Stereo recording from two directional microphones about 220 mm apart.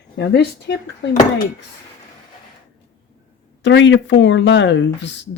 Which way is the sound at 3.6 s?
55° left (ahead or behind).